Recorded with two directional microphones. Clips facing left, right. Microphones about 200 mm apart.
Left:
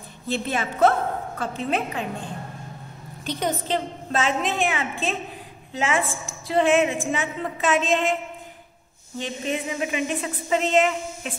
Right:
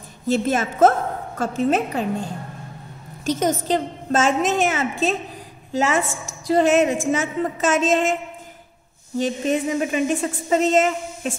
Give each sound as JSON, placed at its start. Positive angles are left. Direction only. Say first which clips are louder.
{"t": 0.3, "sound": "a woman's voice", "louder": "right 6 dB", "side_deg": -45}
{"t": 9.2, "sound": "a woman's voice", "louder": "right 7 dB", "side_deg": -40}